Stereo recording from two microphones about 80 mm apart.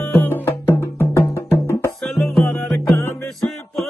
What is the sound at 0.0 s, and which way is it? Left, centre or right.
Music, left.